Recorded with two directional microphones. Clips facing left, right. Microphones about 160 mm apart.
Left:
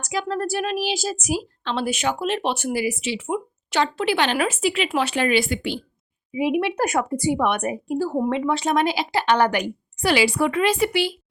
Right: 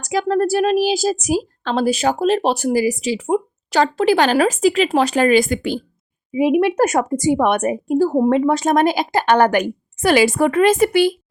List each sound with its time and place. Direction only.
0.0 s a woman's voice: 40° right (ahead or behind)